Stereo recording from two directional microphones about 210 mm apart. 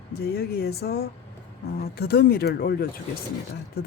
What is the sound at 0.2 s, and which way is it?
Speech, 50° left (ahead or behind).